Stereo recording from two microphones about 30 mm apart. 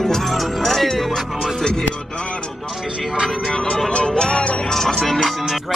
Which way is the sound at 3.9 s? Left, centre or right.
Left.